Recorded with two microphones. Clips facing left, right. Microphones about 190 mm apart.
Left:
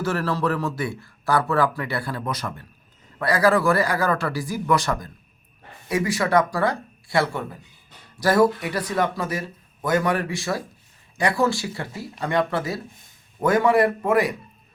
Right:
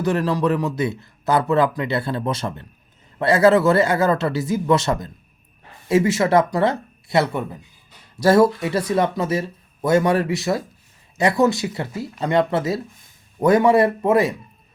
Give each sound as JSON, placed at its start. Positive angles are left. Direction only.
{"t": 0.0, "sound": "a man's voice", "side_deg": -15}